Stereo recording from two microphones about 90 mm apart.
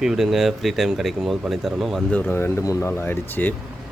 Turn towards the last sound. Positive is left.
turn(degrees=20)  # may be behind; listen again after turning